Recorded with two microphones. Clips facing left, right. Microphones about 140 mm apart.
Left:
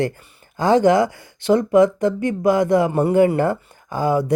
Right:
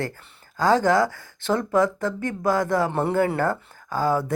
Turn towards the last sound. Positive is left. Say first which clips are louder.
# left 3 dB
turn(degrees=15)  # may be behind; listen again after turning